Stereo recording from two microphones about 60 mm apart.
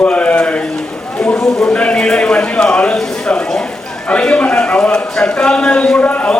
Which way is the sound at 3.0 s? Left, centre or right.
Centre.